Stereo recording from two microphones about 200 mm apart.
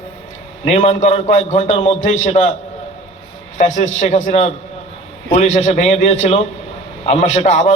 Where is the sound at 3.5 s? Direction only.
35° left (ahead or behind).